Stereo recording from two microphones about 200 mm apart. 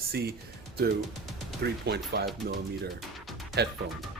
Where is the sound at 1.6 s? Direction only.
55° right (ahead or behind).